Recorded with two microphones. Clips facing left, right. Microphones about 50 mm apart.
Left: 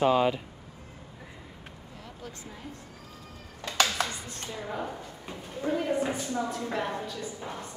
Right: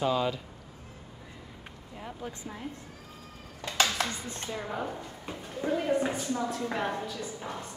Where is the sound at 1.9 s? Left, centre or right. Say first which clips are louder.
Right 5 dB; right.